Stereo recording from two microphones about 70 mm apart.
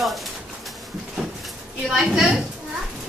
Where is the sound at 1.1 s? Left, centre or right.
Centre.